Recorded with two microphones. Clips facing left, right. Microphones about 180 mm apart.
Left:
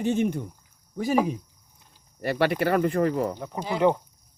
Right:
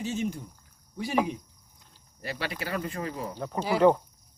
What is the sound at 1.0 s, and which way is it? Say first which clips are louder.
Speech: left 4 dB; 45° left (ahead or behind).